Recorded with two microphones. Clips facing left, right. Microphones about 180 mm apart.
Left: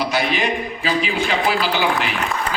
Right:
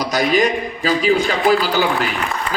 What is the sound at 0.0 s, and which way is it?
A man's voice, 40° right (ahead or behind).